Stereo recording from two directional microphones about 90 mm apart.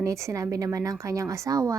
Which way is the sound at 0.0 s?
35° right (ahead or behind).